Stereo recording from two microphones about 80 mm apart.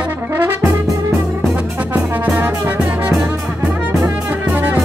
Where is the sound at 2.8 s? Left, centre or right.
Centre.